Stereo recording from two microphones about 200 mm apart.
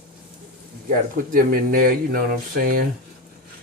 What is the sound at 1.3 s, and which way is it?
Speech, 45° right (ahead or behind).